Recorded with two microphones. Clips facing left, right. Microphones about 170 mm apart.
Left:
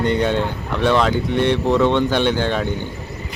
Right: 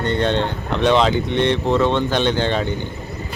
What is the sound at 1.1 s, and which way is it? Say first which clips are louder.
Speech: even; 10° left (ahead or behind).